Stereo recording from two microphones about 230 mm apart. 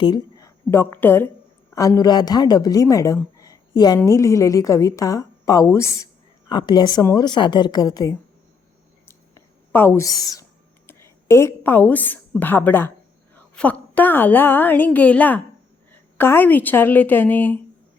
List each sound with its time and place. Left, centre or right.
0.0 s a woman's voice: centre
9.0 s a sound: centre
10.8 s a woman's voice: centre